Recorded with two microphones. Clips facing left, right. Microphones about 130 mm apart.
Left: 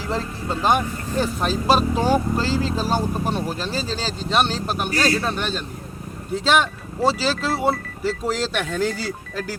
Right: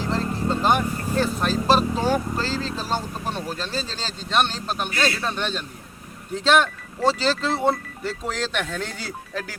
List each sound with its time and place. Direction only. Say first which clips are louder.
0.1 s speech: right 1 dB; 5° left (ahead or behind)
4.9 s speech: left 5 dB; 35° left (ahead or behind)
5.2 s speech: left 2 dB; 5° left (ahead or behind)